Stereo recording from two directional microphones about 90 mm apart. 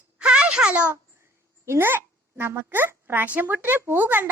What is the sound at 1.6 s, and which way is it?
Speech, 25° right (ahead or behind).